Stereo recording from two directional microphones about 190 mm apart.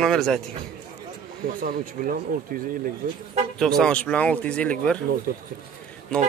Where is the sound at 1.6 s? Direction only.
50° right (ahead or behind).